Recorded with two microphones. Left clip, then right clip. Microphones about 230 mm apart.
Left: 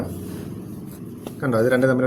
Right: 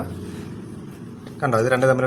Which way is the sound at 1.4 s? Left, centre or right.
Right.